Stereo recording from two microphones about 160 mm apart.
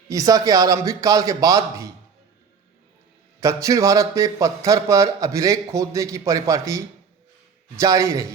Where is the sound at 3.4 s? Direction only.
20° right (ahead or behind).